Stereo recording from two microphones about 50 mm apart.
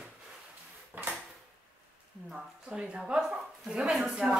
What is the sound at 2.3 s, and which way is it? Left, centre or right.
A woman's voice, centre.